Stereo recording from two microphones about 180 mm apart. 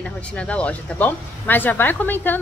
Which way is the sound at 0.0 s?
5° left (ahead or behind).